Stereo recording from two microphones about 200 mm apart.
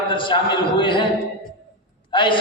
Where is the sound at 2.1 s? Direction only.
25° left (ahead or behind).